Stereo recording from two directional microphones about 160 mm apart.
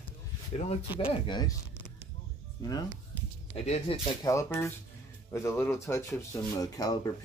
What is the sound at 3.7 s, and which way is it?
Speech, 45° left (ahead or behind).